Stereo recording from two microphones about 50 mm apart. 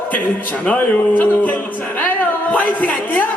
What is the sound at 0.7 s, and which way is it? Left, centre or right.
Speech, left.